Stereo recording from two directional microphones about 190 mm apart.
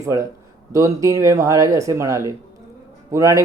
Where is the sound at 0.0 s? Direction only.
15° right (ahead or behind).